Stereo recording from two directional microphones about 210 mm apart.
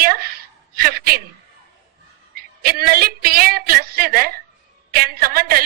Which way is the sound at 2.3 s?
45° right (ahead or behind).